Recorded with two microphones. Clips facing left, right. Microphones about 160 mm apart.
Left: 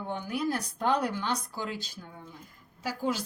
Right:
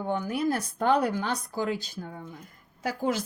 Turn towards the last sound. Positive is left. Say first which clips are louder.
# right 3 dB
turn(degrees=-50)  # may be behind; listen again after turning